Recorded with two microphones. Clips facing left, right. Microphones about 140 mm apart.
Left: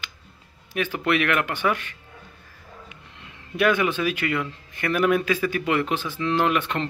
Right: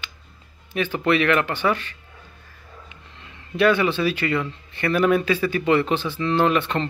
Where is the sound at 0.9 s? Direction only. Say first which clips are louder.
Right 4 dB; 5° left (ahead or behind).